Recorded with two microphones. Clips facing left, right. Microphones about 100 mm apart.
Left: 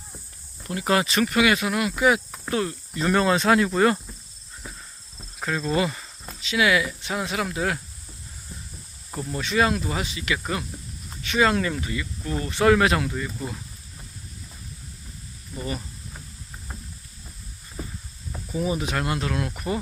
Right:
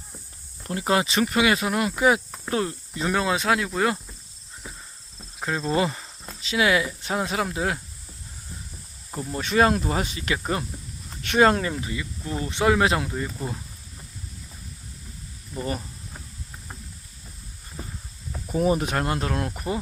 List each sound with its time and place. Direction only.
0.6 s speech: 30° right (ahead or behind)
3.0 s speech: 5° right (ahead or behind)
5.4 s speech: 25° right (ahead or behind)
9.4 s speech: 45° right (ahead or behind)
11.2 s speech: 60° right (ahead or behind)
11.4 s speech: 35° right (ahead or behind)
11.7 s speech: 20° right (ahead or behind)
12.9 s speech: 30° right (ahead or behind)
15.5 s speech: 40° right (ahead or behind)
18.5 s speech: 50° right (ahead or behind); by 19.8 s 25° right (ahead or behind)